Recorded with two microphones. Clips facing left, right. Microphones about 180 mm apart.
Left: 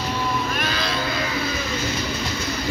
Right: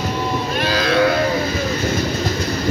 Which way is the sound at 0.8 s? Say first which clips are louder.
Right 10 dB; 60° right (ahead or behind).